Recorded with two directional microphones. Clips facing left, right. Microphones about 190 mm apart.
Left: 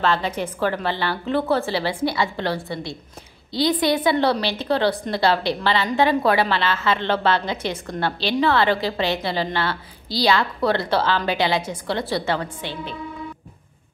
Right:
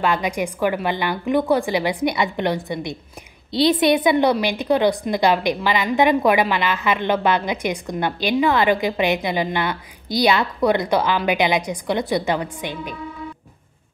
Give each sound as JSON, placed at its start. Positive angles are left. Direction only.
{"t": 0.0, "sound": "a woman's voice", "side_deg": -15}